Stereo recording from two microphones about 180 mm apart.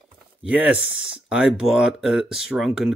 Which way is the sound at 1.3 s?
5° right (ahead or behind).